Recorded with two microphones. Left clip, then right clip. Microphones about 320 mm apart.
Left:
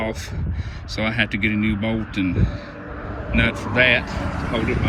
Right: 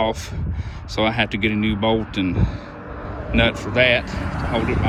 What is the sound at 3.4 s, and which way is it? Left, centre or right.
Speech, centre.